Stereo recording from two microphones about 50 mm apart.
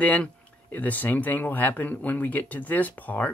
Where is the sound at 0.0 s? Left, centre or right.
Left.